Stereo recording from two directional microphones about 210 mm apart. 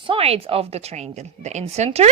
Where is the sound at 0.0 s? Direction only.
25° right (ahead or behind).